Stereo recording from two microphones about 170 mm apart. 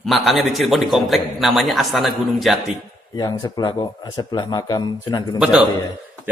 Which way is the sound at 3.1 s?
20° left (ahead or behind).